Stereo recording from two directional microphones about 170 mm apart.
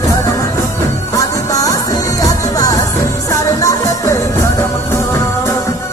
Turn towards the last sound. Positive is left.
turn(degrees=20)  # may be behind; listen again after turning